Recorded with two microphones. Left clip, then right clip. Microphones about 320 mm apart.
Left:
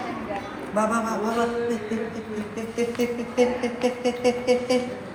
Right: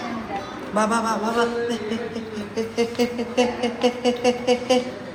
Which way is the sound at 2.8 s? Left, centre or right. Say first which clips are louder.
Right 2 dB; centre.